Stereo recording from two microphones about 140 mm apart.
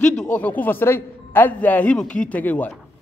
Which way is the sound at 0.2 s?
10° left (ahead or behind).